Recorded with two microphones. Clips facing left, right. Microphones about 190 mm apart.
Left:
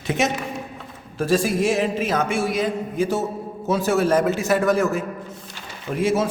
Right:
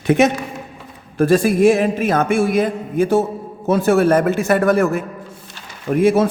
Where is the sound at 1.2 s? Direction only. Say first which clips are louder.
Right 7 dB; 55° right (ahead or behind).